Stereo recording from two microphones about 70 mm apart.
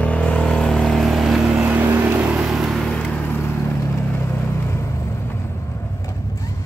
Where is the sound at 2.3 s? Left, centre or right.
Centre.